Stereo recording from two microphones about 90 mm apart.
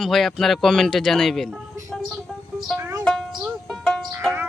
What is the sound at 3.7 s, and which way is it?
Music, 5° left (ahead or behind).